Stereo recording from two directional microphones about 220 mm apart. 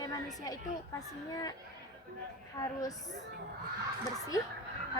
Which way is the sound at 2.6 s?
15° left (ahead or behind).